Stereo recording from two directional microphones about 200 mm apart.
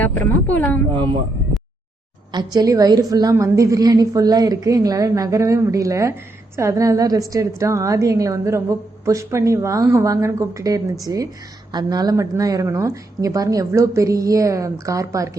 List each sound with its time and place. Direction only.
0.0 s speech: 10° left (ahead or behind)
2.3 s a woman's voice: 20° right (ahead or behind)